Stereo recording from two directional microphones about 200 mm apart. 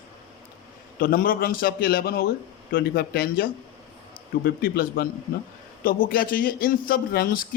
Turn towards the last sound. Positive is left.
turn(degrees=45)  # may be behind; listen again after turning